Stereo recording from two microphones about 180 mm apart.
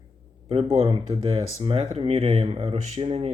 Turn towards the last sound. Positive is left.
turn(degrees=-35)  # may be behind; listen again after turning